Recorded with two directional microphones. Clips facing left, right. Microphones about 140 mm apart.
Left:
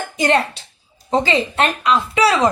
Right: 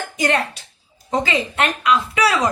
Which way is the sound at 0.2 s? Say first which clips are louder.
Left 3 dB; 30° left (ahead or behind).